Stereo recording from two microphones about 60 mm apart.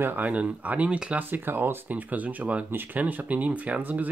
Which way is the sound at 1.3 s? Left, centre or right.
Right.